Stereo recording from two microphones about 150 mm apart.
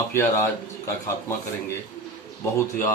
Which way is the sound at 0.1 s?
15° left (ahead or behind).